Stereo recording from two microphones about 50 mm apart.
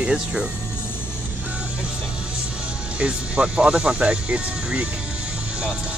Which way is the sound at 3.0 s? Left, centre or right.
Right.